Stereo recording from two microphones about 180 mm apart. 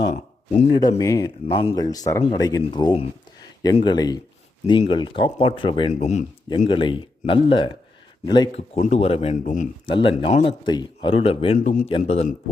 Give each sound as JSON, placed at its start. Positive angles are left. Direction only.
{"t": 0.8, "sound": "speech", "side_deg": 20}
{"t": 6.7, "sound": "speech", "side_deg": 30}
{"t": 9.8, "sound": "speech", "side_deg": 30}
{"t": 11.9, "sound": "speech", "side_deg": 35}